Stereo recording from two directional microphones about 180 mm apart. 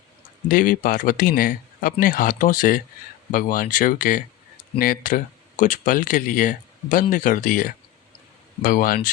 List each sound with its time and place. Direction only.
0.4 s speech: 50° left (ahead or behind)